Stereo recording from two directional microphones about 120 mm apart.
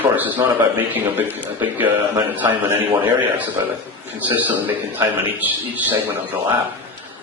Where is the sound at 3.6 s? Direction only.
30° right (ahead or behind).